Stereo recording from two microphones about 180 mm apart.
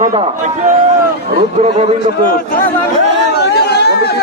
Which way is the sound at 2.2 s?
55° left (ahead or behind).